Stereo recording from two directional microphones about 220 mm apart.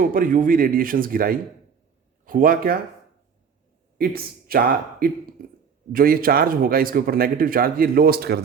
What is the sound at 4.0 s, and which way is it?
A man's voice, 45° right (ahead or behind).